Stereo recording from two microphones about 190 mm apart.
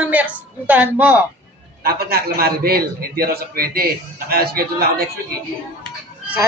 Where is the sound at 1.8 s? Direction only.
55° right (ahead or behind).